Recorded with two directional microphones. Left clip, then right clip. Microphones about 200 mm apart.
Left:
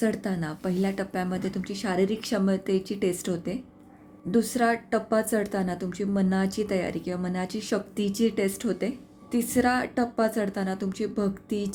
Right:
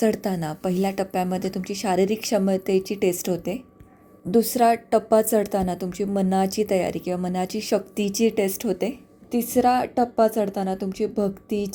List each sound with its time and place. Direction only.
0.0 s a woman's voice: 20° right (ahead or behind)